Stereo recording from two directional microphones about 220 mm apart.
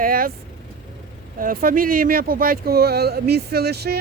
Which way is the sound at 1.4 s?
40° right (ahead or behind).